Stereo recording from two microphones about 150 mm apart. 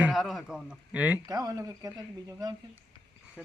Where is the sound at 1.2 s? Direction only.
25° right (ahead or behind).